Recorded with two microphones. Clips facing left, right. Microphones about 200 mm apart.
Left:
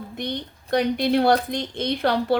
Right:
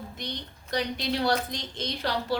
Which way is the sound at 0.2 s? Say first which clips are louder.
Left 12 dB; 55° left (ahead or behind).